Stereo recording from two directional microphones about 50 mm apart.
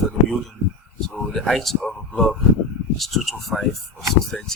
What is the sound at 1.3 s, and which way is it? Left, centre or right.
Speech, centre.